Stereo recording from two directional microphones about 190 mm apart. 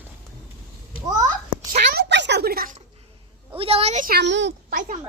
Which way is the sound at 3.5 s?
30° right (ahead or behind).